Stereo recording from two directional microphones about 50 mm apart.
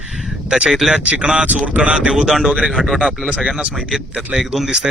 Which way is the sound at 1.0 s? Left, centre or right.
Right.